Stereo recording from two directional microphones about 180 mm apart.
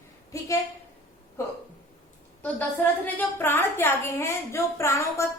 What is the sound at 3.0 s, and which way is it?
A woman's voice, 10° left (ahead or behind).